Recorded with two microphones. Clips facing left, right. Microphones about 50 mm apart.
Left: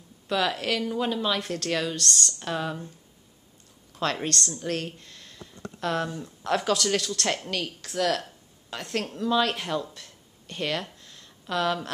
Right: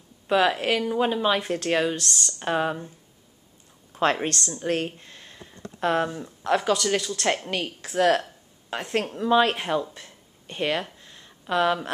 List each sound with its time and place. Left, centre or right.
0.3 s speech: right
2.0 s speech: centre
2.3 s speech: right
3.9 s speech: right
6.4 s speech: centre